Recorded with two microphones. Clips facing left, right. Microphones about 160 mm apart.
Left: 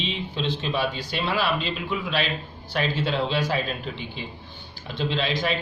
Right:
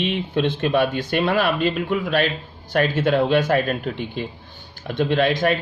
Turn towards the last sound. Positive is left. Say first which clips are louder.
# right 7 dB
turn(degrees=-55)  # may be behind; listen again after turning